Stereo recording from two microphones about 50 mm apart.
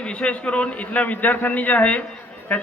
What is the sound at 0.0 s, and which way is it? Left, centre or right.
A man's voice, left.